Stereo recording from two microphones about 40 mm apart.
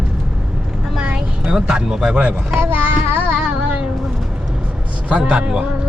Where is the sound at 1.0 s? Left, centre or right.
Right.